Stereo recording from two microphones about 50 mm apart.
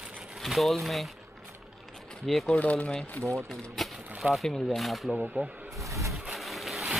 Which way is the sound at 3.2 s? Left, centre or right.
Right.